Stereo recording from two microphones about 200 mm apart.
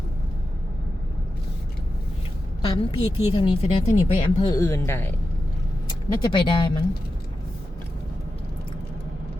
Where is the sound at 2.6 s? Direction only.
25° left (ahead or behind).